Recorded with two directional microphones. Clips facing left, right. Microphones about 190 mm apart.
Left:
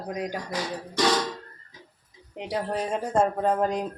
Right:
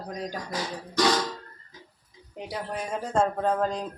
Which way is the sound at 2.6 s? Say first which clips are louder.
Left 5 dB; 30° left (ahead or behind).